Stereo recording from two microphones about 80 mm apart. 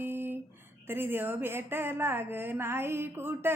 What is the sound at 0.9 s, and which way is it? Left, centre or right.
A woman's voice, right.